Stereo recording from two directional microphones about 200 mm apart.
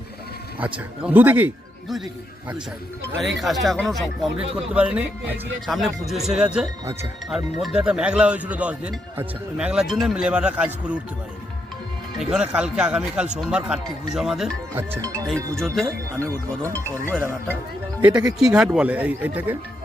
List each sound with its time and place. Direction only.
0.6 s speech: 10° right (ahead or behind)
3.2 s speech: centre (ahead or behind)
12.3 s speech: 5° right (ahead or behind)
15.5 s speech: centre (ahead or behind)
16.1 s speech: 15° right (ahead or behind)
18.3 s speech: centre (ahead or behind)